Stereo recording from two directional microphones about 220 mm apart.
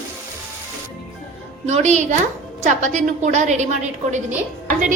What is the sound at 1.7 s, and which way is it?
Sizzle, 30° right (ahead or behind).